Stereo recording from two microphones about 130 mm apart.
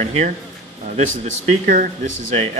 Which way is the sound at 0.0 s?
60° right (ahead or behind).